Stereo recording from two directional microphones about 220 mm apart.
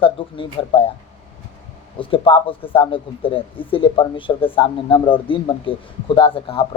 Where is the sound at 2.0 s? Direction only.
25° left (ahead or behind).